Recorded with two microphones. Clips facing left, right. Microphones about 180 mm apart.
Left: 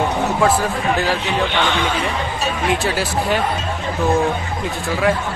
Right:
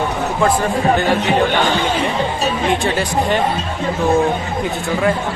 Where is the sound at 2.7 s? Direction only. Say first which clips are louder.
Right 2 dB; 5° left (ahead or behind).